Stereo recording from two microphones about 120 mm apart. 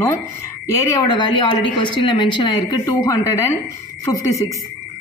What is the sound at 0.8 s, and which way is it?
A woman's voice, 30° left (ahead or behind).